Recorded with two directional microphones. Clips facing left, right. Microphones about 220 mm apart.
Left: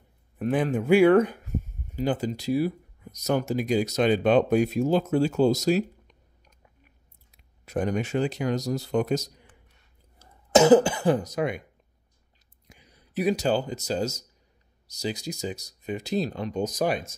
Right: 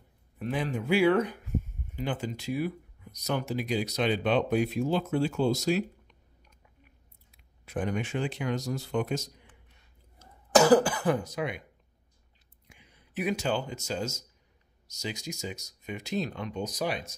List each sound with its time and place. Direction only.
0.4 s speech: 50° left (ahead or behind)
7.2 s speech: 40° left (ahead or behind)
10.5 s cough: 20° left (ahead or behind)
11.2 s speech: 45° left (ahead or behind)
12.6 s speech: 40° left (ahead or behind)